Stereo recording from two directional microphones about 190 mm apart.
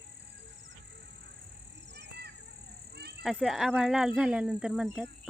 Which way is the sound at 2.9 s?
60° right (ahead or behind).